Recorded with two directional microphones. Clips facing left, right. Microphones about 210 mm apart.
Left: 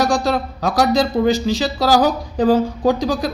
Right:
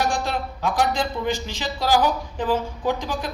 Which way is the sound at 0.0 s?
35° left (ahead or behind).